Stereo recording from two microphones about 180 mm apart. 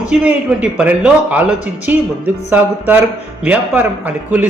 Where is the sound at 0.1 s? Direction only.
5° right (ahead or behind).